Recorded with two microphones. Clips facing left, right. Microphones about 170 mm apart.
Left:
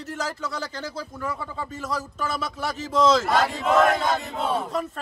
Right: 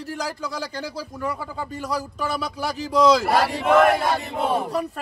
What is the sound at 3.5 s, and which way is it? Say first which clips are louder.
Chant: right 5 dB; 60° right (ahead or behind).